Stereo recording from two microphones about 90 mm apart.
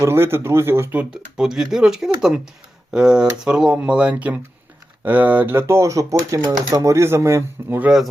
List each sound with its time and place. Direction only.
0.0 s speech: 30° right (ahead or behind)
1.1 s speech: 5° right (ahead or behind); by 7.8 s 30° right (ahead or behind)